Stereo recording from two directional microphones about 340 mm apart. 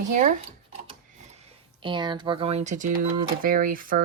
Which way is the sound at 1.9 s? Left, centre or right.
Centre.